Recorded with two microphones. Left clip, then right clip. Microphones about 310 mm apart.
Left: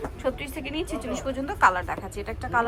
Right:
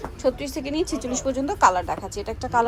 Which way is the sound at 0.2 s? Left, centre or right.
Centre.